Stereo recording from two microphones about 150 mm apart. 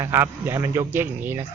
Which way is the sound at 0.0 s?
15° right (ahead or behind).